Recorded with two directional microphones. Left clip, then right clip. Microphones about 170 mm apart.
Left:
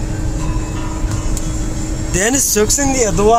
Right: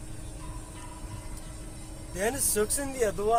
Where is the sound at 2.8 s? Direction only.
15° right (ahead or behind).